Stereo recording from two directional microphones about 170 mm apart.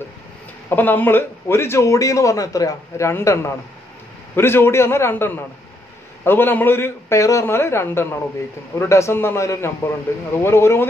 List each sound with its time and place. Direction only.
0.7 s a man's voice: 10° left (ahead or behind)